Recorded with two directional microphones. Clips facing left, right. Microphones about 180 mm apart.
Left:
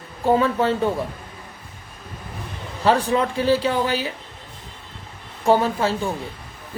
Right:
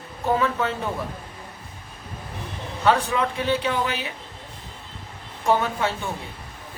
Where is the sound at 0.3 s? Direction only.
30° left (ahead or behind).